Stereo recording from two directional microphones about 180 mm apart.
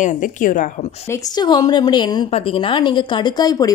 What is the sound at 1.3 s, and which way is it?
A woman's voice, 25° left (ahead or behind).